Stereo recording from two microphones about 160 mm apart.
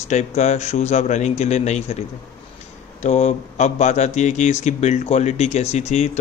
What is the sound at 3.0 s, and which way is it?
A man's voice, 45° left (ahead or behind).